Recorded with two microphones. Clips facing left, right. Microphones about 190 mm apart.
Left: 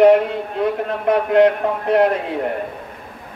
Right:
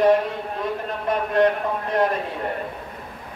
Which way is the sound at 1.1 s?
65° left (ahead or behind).